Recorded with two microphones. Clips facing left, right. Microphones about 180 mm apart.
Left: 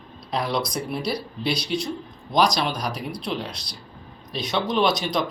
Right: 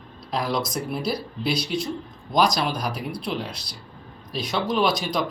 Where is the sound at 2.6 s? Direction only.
5° right (ahead or behind).